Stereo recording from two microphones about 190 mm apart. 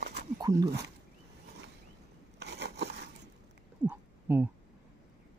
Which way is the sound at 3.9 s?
10° right (ahead or behind).